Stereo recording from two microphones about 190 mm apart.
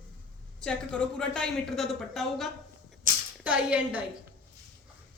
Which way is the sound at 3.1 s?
45° right (ahead or behind).